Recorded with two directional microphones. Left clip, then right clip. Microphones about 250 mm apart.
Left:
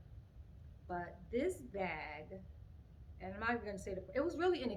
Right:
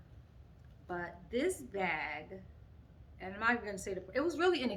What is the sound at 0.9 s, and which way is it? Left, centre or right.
A woman's voice, centre.